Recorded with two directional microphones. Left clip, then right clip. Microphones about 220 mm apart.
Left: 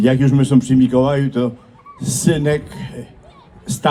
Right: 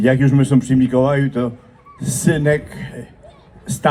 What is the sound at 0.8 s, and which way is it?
Speech, 30° left (ahead or behind).